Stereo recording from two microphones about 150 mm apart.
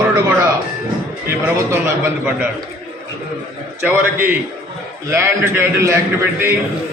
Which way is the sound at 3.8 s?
10° right (ahead or behind).